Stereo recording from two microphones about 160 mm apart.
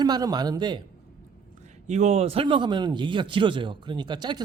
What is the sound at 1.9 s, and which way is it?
A man's voice, 45° right (ahead or behind).